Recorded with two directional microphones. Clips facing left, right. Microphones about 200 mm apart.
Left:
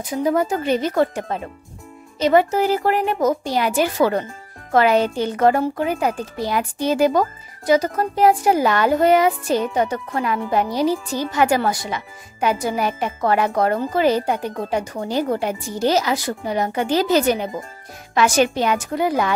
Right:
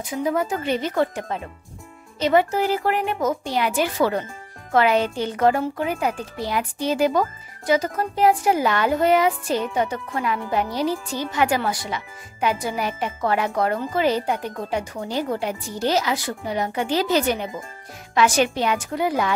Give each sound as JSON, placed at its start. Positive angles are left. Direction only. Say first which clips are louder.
{"t": 0.0, "sound": "a child's voice", "louder": "left 4 dB", "side_deg": 40}